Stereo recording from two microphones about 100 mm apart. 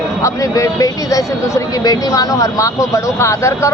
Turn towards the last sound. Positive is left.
turn(degrees=30)  # may be behind; listen again after turning